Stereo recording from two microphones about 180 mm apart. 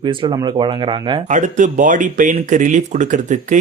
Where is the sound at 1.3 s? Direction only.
45° right (ahead or behind).